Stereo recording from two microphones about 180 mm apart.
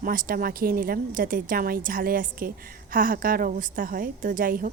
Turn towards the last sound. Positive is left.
turn(degrees=-50)  # may be behind; listen again after turning